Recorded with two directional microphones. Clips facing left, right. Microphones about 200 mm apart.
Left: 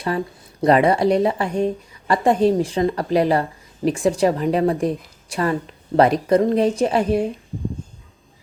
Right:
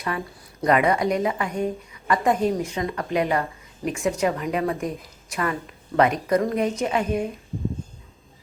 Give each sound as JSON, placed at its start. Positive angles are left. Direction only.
{"t": 0.6, "sound": "a woman's voice", "side_deg": 30}